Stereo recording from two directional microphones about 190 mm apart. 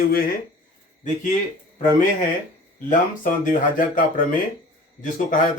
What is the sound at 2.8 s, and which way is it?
Speech, 45° left (ahead or behind).